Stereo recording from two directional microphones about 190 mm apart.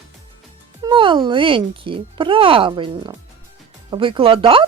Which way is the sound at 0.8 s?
25° right (ahead or behind).